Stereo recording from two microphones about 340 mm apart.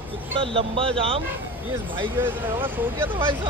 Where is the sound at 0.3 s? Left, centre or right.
Centre.